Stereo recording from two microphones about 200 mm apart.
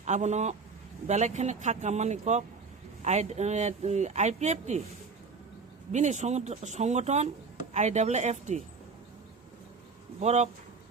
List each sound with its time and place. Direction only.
0.0 s speech: 35° right (ahead or behind)
5.9 s speech: 35° right (ahead or behind)
10.2 s speech: 35° right (ahead or behind)